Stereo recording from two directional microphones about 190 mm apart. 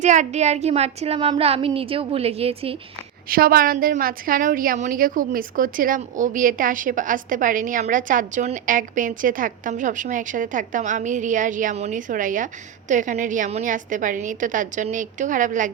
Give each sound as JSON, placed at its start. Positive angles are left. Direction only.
{"t": 0.0, "sound": "speech", "side_deg": -40}
{"t": 3.2, "sound": "a woman's voice", "side_deg": -50}